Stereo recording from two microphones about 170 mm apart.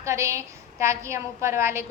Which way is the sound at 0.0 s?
15° right (ahead or behind).